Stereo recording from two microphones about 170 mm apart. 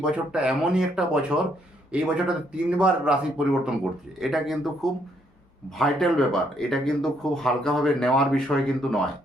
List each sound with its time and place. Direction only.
0.0 s speech: 5° right (ahead or behind)